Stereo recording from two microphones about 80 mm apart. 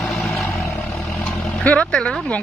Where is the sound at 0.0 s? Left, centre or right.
Centre.